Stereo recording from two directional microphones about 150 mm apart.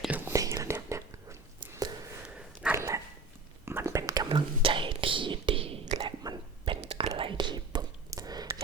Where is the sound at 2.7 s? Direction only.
20° right (ahead or behind).